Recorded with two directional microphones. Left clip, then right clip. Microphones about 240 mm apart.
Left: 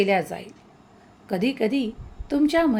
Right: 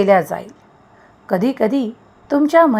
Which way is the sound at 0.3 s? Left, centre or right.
Centre.